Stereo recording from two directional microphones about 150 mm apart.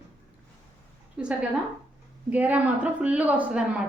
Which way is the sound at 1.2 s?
5° right (ahead or behind).